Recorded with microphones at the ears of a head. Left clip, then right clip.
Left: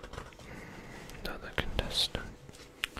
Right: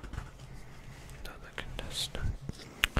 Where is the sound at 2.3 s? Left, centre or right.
Right.